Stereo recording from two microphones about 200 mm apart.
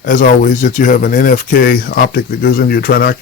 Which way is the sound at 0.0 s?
40° left (ahead or behind).